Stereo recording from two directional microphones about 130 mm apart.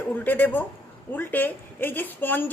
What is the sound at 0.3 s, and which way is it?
A woman's voice, 15° left (ahead or behind).